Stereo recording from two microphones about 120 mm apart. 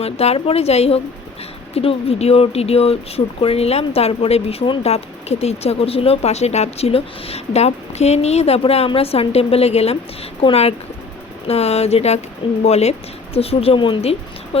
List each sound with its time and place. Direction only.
0.0 s speech: 60° left (ahead or behind)
14.0 s a woman's voice: 55° left (ahead or behind)